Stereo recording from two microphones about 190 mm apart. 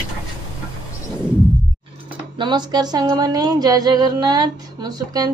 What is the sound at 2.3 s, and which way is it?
Speech, 25° right (ahead or behind).